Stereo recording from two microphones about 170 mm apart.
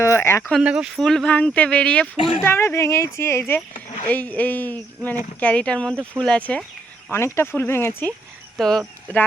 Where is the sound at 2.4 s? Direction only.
15° left (ahead or behind).